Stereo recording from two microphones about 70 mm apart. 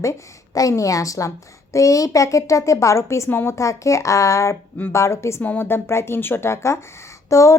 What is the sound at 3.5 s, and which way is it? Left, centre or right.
A woman's voice, left.